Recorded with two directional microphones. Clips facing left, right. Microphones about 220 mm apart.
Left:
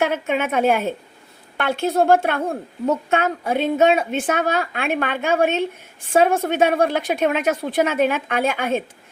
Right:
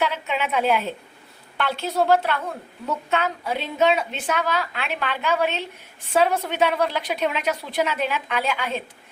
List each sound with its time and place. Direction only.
0.0 s a woman's voice: 50° left (ahead or behind)